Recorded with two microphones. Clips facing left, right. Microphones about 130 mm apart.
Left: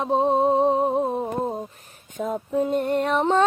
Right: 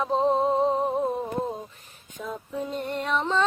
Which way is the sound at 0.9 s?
25° left (ahead or behind).